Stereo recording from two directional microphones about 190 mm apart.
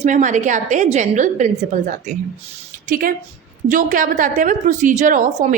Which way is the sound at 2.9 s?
45° right (ahead or behind).